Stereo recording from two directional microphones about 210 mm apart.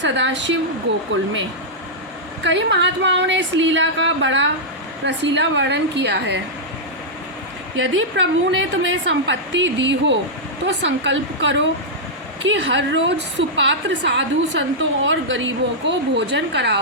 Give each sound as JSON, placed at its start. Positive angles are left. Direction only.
{"t": 0.0, "sound": "a woman's voice", "side_deg": -60}
{"t": 2.4, "sound": "a woman's voice", "side_deg": -55}
{"t": 7.8, "sound": "a woman's voice", "side_deg": -65}